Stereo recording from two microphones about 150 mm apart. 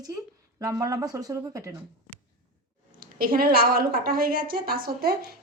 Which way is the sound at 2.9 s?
75° right (ahead or behind).